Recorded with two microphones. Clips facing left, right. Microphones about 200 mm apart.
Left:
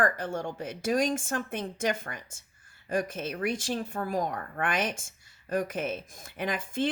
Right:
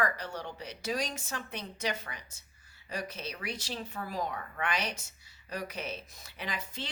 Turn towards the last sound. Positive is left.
turn(degrees=50)  # may be behind; listen again after turning